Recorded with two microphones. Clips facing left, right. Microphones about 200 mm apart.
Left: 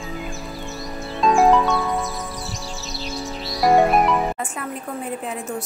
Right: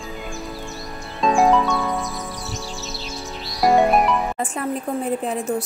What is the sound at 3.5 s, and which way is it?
Music, centre (ahead or behind).